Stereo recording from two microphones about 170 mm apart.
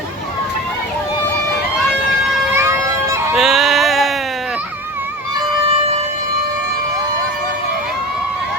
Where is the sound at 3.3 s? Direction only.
Centre (ahead or behind).